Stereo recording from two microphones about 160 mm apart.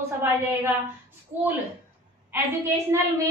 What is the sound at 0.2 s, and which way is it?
Speech, 15° right (ahead or behind).